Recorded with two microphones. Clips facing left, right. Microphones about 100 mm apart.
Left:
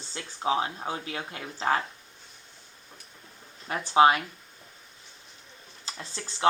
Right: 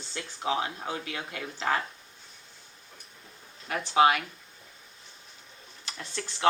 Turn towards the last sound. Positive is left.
turn(degrees=30)  # may be behind; listen again after turning